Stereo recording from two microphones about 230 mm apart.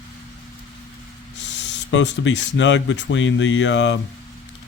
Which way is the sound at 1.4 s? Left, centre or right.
Left.